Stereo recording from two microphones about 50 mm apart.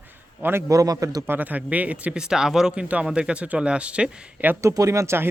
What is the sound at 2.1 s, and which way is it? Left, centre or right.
Speech, centre.